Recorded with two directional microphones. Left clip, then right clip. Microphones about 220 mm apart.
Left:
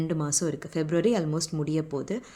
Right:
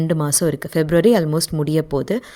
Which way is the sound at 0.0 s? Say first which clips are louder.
Right 9 dB; 40° right (ahead or behind).